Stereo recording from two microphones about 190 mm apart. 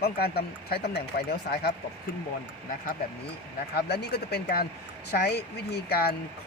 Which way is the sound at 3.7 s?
60° left (ahead or behind).